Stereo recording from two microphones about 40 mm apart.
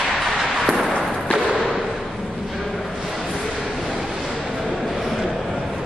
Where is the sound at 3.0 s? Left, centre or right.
Centre.